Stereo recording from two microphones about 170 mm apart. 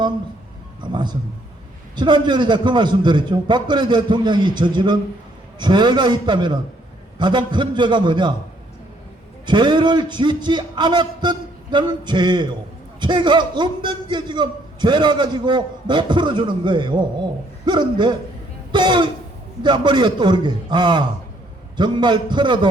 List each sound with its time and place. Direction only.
2.0 s a man's voice: 25° right (ahead or behind)
9.5 s a man's voice: 25° right (ahead or behind)
18.7 s a sound: 25° right (ahead or behind)
19.6 s a man's voice: 25° right (ahead or behind)